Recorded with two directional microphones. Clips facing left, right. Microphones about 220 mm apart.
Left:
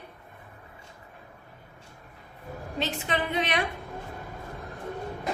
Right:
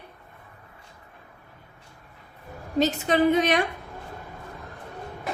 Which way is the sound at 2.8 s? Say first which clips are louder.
Right 9 dB; 40° right (ahead or behind).